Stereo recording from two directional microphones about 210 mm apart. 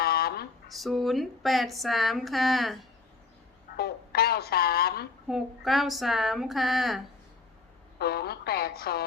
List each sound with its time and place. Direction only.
0.0 s a sound: 45° left (ahead or behind)
0.7 s speech: centre (ahead or behind)
3.8 s speech: 50° left (ahead or behind)
5.3 s speech: centre (ahead or behind)
7.9 s speech: 50° left (ahead or behind)